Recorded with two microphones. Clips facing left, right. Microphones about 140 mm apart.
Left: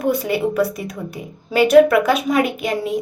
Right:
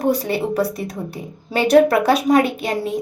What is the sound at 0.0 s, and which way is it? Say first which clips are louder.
A woman's voice: even; 35° right (ahead or behind).